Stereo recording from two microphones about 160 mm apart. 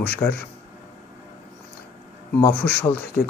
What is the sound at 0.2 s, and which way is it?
Speech, 20° left (ahead or behind).